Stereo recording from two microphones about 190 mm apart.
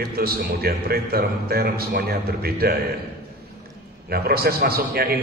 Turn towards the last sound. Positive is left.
turn(degrees=-55)  # may be behind; listen again after turning